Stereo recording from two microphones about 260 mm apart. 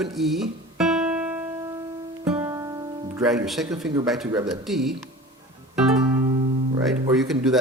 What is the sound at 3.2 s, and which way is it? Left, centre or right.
Speech, centre.